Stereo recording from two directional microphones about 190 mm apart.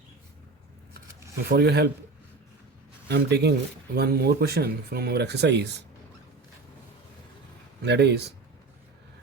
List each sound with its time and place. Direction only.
1.5 s speech: 60° right (ahead or behind)
3.1 s speech: 60° right (ahead or behind)
7.8 s speech: 60° right (ahead or behind)